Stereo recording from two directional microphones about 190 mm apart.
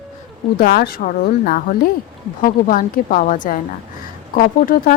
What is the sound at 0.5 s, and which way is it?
Speech, 55° left (ahead or behind).